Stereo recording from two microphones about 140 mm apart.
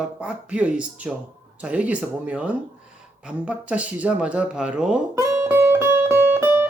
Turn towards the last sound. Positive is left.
turn(degrees=-15)  # may be behind; listen again after turning